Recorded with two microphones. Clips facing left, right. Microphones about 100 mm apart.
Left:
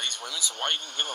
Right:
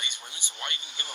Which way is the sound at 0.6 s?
60° left (ahead or behind).